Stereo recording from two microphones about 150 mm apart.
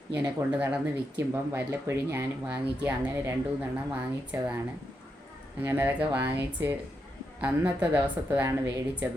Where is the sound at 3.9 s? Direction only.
10° right (ahead or behind).